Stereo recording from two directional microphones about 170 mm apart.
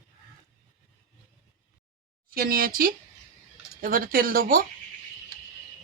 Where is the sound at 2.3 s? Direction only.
60° right (ahead or behind).